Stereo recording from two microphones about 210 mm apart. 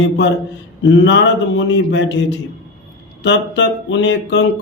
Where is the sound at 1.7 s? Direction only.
60° left (ahead or behind).